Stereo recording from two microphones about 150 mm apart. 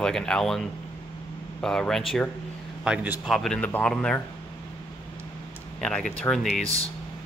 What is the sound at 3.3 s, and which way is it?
Speech, 5° left (ahead or behind).